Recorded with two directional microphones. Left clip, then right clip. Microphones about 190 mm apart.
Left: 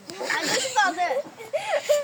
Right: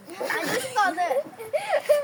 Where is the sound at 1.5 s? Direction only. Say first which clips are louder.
Right 1 dB; centre (ahead or behind).